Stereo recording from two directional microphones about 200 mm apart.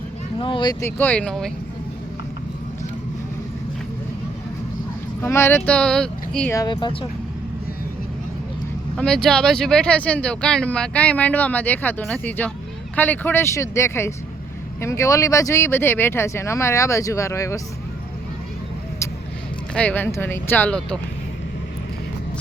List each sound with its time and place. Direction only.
0.3 s speech: 25° left (ahead or behind); by 1.5 s 5° left (ahead or behind)
5.2 s speech: 15° left (ahead or behind)
6.5 s speech: 20° left (ahead or behind)
9.0 s speech: 5° left (ahead or behind)
19.7 s speech: 5° left (ahead or behind)